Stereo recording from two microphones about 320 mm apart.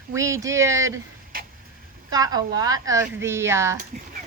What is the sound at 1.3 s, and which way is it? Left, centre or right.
Vehicle, right.